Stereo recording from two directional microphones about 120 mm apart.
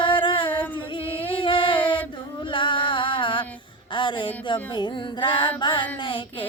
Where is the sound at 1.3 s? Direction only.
45° left (ahead or behind).